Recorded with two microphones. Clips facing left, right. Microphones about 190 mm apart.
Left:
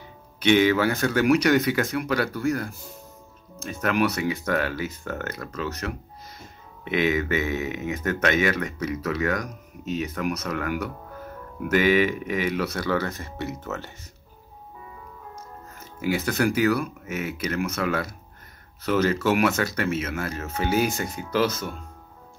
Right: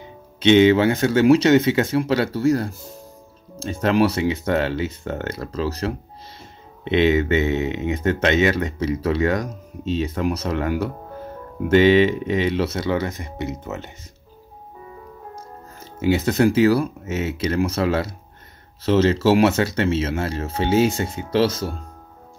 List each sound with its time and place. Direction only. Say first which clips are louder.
0.0 s speech: right 5 dB; 25° right (ahead or behind)
15.3 s speech: right 3 dB; 25° right (ahead or behind)